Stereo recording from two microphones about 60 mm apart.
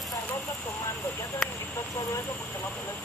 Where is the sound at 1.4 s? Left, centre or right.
Centre.